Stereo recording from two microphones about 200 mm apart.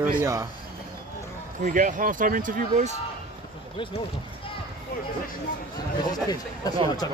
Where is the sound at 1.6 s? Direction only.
40° right (ahead or behind).